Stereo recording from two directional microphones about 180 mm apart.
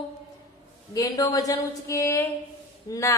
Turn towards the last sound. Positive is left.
turn(degrees=20)  # may be behind; listen again after turning